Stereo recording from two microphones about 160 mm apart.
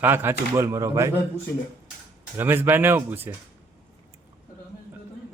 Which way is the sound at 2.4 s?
15° right (ahead or behind).